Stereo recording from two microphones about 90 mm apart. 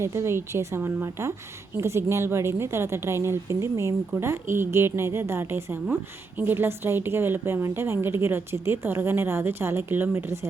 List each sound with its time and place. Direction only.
0.0 s a woman's voice: 30° right (ahead or behind)